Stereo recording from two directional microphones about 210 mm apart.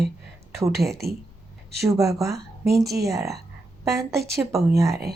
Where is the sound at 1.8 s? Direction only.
15° right (ahead or behind).